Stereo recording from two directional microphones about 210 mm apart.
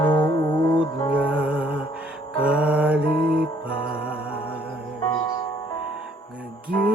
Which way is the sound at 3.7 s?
25° left (ahead or behind).